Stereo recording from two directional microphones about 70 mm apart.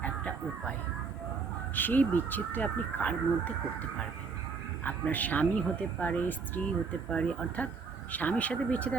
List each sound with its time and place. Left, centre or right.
0.0 s speech: left
7.1 s speech: centre